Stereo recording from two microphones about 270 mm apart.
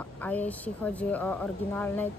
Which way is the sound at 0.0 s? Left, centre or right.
Centre.